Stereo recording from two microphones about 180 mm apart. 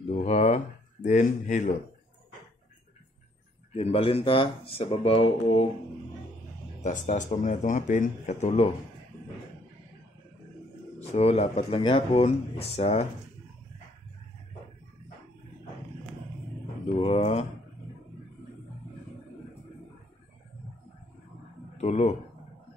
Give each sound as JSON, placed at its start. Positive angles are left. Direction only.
{"t": 0.1, "sound": "speech", "side_deg": 40}
{"t": 3.7, "sound": "speech", "side_deg": 30}
{"t": 6.8, "sound": "speech", "side_deg": 45}
{"t": 11.0, "sound": "speech", "side_deg": 35}
{"t": 16.8, "sound": "speech", "side_deg": 35}
{"t": 21.7, "sound": "speech", "side_deg": 35}